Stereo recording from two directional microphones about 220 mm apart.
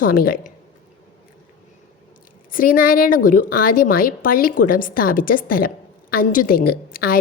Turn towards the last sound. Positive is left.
turn(degrees=45)  # may be behind; listen again after turning